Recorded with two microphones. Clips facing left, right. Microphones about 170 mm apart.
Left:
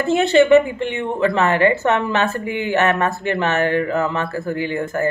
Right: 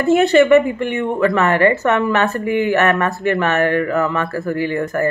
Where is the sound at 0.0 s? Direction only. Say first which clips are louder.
Right 2 dB; 25° left (ahead or behind).